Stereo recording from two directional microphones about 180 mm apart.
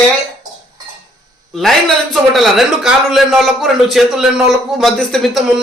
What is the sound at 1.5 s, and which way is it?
A man's voice, centre (ahead or behind).